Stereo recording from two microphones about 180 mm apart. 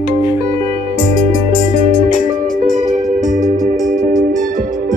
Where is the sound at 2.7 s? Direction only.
45° right (ahead or behind).